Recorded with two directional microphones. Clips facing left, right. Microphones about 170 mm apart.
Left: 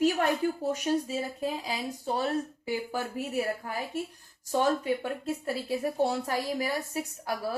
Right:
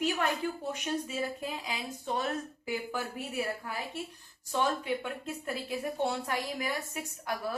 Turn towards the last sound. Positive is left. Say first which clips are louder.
# left 2 dB
turn(degrees=35)  # may be behind; listen again after turning